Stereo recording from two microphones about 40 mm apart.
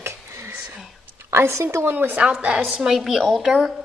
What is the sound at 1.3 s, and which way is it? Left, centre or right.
Speech, right.